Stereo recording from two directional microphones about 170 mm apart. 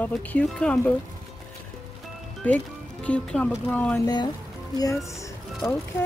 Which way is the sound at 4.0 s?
25° left (ahead or behind).